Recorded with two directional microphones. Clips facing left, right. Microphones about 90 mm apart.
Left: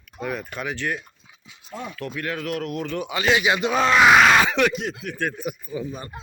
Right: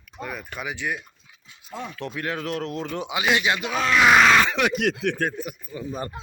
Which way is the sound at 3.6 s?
35° left (ahead or behind).